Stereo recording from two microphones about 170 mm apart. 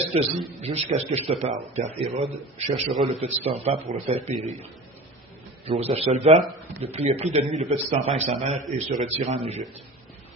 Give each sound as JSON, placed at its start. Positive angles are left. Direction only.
{"t": 0.1, "sound": "a man's voice", "side_deg": -35}
{"t": 5.6, "sound": "a man's voice", "side_deg": -35}